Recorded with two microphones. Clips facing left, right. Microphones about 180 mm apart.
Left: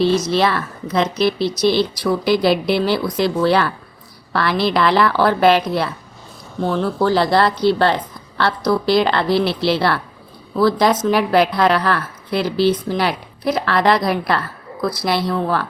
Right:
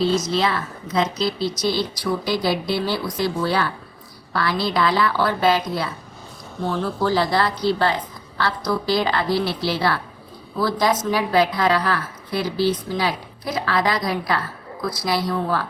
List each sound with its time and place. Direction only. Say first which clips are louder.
0.0 s a woman's voice: left 4 dB; 70° left (ahead or behind)